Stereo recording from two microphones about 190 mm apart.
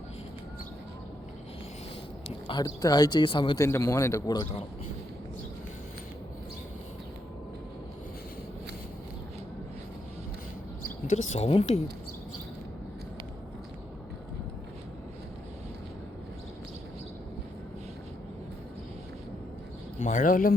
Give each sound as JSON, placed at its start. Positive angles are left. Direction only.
{"t": 2.2, "sound": "speech", "side_deg": 25}
{"t": 10.8, "sound": "speech", "side_deg": 40}
{"t": 20.0, "sound": "a man's voice", "side_deg": 40}